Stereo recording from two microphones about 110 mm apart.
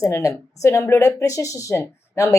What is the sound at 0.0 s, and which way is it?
Speech, 30° left (ahead or behind).